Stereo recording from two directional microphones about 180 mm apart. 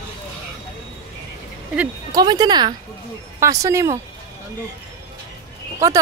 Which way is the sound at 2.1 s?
20° right (ahead or behind).